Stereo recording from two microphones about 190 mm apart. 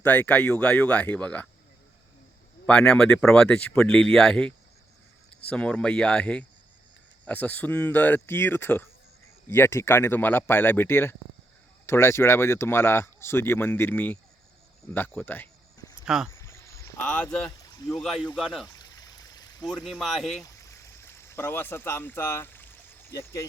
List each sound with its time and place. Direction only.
0.0 s speech: 10° left (ahead or behind)
2.6 s speech: 5° left (ahead or behind)
14.9 s a sound: 10° left (ahead or behind)
16.0 s speech: 5° right (ahead or behind)
16.3 s a sound: 15° left (ahead or behind)
17.0 s speech: 5° left (ahead or behind)
17.6 s a sound: 20° left (ahead or behind)
17.9 s speech: centre (ahead or behind)
18.7 s stream: 20° left (ahead or behind)
19.6 s speech: centre (ahead or behind)
20.4 s stream: 15° left (ahead or behind)